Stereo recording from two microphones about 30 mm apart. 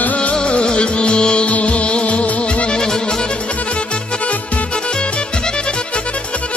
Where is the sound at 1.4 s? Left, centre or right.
Left.